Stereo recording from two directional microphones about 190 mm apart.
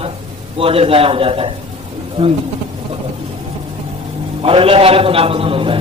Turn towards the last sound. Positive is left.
turn(degrees=-30)  # may be behind; listen again after turning